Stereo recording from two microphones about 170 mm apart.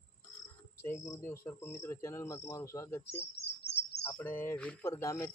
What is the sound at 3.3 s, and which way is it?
Chirp, 75° left (ahead or behind).